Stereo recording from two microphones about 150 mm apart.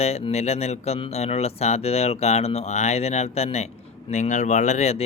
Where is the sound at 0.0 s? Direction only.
45° left (ahead or behind).